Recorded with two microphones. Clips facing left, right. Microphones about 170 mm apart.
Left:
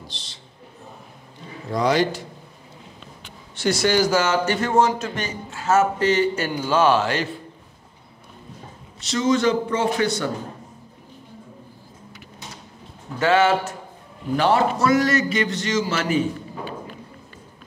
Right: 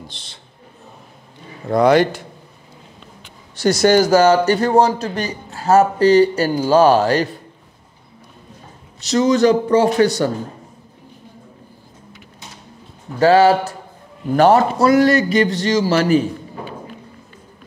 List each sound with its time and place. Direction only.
0.1 s a sound: 55° right (ahead or behind)
1.7 s a man's voice: 55° right (ahead or behind)
3.5 s a man's voice: 40° right (ahead or behind)
9.0 s a man's voice: 40° right (ahead or behind)
13.2 s a man's voice: 35° right (ahead or behind)